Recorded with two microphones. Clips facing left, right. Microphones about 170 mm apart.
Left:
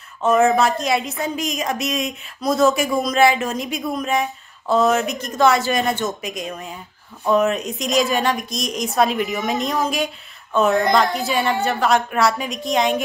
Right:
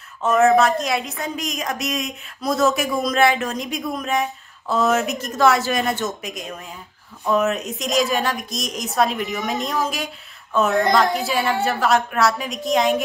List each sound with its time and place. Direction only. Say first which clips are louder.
0.2 s a woman's voice: even; centre (ahead or behind)